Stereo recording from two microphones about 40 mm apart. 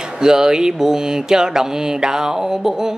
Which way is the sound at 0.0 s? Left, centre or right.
Centre.